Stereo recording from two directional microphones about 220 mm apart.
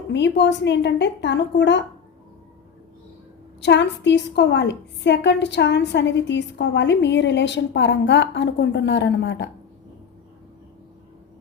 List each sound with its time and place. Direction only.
0.1 s a woman's voice: 50° left (ahead or behind)
3.6 s a woman's voice: 50° left (ahead or behind)